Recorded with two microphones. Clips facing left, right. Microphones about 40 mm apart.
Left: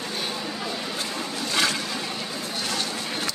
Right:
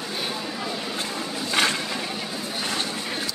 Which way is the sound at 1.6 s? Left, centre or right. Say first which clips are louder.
Right 2 dB; right.